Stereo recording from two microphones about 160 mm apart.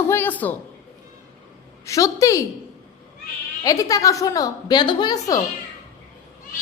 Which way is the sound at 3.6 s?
20° left (ahead or behind).